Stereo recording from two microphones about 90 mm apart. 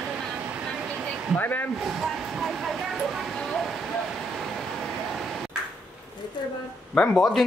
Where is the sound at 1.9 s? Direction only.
5° right (ahead or behind).